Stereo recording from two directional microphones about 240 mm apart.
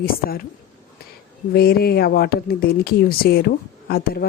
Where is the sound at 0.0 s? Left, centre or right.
Left.